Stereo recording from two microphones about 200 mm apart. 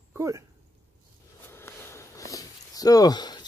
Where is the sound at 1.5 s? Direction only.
10° left (ahead or behind).